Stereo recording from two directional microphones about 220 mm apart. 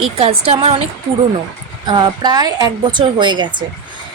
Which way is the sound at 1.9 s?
20° right (ahead or behind).